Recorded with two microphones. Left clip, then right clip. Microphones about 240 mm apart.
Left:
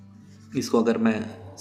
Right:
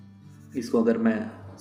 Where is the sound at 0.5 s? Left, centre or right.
Left.